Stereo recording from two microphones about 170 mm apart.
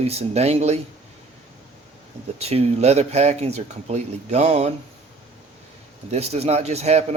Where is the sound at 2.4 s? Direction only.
35° right (ahead or behind).